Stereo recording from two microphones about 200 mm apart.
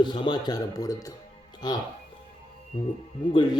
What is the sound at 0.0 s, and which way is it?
Speech, 20° left (ahead or behind).